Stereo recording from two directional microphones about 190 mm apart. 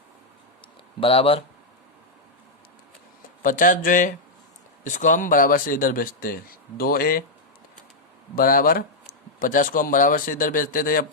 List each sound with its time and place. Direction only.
0.9 s speech: 30° left (ahead or behind)
3.4 s speech: 45° left (ahead or behind)
8.4 s speech: 50° left (ahead or behind)